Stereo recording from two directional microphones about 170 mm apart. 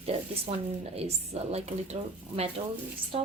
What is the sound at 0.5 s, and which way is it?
A woman's voice, 40° right (ahead or behind).